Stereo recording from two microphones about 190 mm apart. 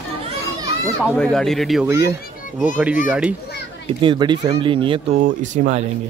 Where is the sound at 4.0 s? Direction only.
25° right (ahead or behind).